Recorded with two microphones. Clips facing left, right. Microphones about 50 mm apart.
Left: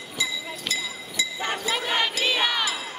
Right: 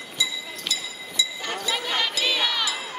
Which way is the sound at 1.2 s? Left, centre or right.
Left.